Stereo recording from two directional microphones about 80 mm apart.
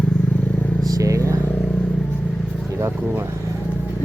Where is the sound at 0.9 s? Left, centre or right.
Right.